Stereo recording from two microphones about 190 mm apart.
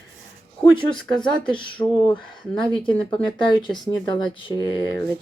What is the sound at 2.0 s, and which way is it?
Speech, 25° left (ahead or behind).